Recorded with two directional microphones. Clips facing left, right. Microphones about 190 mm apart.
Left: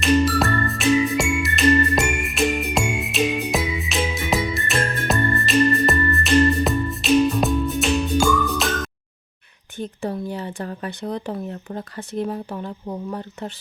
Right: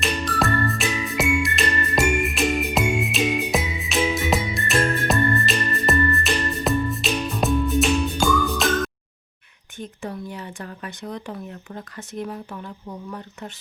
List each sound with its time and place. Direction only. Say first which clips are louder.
0.0 s music: left 6 dB; centre (ahead or behind)
9.7 s speech: left 5 dB; 35° left (ahead or behind)